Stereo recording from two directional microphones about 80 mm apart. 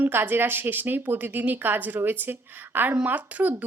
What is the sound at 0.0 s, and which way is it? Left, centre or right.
A woman's voice, right.